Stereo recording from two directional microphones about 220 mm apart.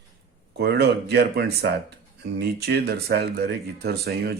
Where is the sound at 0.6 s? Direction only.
50° right (ahead or behind).